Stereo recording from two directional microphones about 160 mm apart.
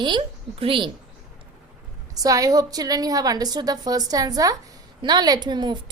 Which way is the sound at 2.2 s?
20° right (ahead or behind).